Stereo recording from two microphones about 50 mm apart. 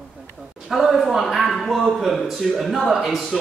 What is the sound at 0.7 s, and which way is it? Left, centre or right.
Speech, centre.